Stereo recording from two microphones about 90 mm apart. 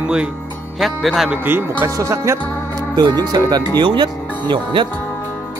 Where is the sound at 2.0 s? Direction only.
35° right (ahead or behind).